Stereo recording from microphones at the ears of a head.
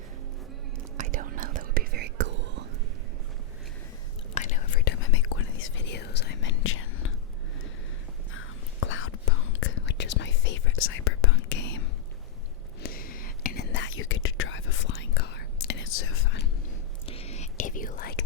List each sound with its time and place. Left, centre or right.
0.9 s whispering: right
4.4 s whispering: left
8.3 s whispering: left